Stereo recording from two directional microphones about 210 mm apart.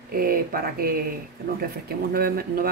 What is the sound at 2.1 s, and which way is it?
Speech, 45° right (ahead or behind).